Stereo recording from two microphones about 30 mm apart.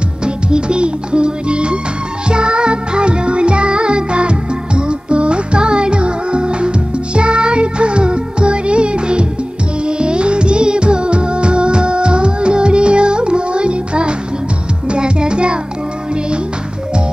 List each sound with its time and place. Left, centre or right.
0.2 s music: right